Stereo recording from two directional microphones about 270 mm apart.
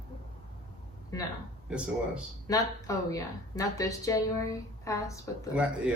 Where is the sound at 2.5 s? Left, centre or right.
Centre.